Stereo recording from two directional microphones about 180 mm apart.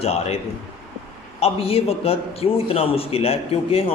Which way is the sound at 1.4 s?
30° left (ahead or behind).